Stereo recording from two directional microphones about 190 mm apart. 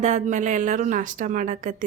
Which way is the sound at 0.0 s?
40° right (ahead or behind).